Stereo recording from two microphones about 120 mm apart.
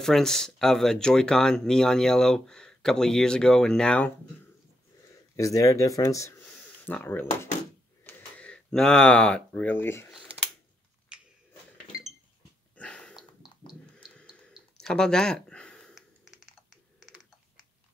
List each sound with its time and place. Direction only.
0.0 s speech: 5° left (ahead or behind)
5.3 s speech: 30° left (ahead or behind)
6.9 s speech: 15° left (ahead or behind)
8.0 s a sound: 15° left (ahead or behind)
12.7 s dog: 10° left (ahead or behind)
14.8 s a sound: 5° left (ahead or behind)